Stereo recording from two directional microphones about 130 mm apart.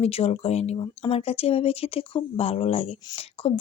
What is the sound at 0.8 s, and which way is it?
Speech, 45° left (ahead or behind).